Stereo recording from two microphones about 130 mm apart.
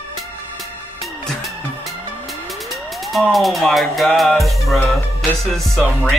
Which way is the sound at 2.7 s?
Centre (ahead or behind).